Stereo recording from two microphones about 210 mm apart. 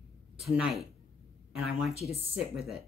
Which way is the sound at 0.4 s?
5° right (ahead or behind).